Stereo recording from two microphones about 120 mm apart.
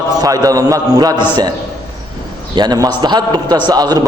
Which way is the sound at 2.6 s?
30° right (ahead or behind).